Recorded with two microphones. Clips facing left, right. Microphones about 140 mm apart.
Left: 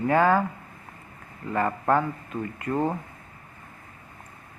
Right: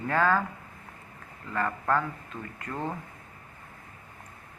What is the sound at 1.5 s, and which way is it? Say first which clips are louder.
A man's voice: left 5 dB; 20° left (ahead or behind).